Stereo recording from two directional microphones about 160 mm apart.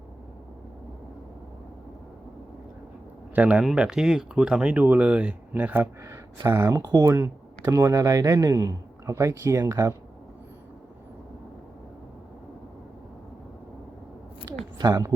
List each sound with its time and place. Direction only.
3.3 s speech: 10° right (ahead or behind)
14.8 s speech: 25° right (ahead or behind)